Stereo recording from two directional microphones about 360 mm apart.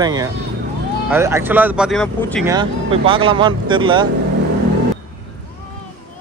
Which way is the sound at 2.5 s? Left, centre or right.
Centre.